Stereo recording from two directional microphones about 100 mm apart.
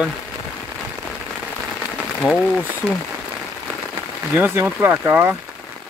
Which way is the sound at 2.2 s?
5° left (ahead or behind).